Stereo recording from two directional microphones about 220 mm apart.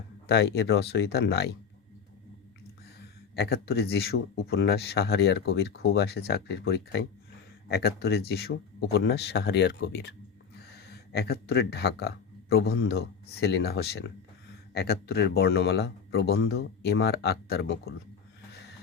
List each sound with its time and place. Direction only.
0.3 s speech: 50° left (ahead or behind)
3.3 s speech: 45° left (ahead or behind)